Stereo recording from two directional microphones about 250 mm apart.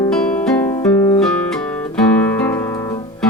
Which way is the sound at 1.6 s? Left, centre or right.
Centre.